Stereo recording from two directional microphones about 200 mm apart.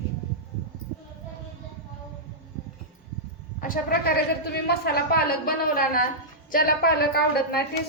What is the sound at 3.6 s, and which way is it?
A woman's voice, 50° left (ahead or behind).